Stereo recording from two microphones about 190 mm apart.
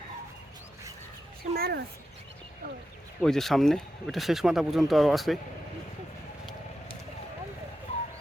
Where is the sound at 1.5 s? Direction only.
55° right (ahead or behind).